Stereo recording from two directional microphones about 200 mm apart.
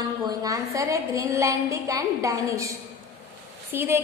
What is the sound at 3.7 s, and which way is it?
Speech, 10° right (ahead or behind).